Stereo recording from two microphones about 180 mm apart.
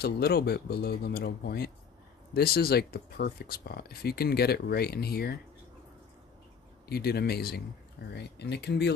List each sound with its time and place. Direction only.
0.0 s speech: 60° left (ahead or behind)
6.9 s speech: 60° left (ahead or behind)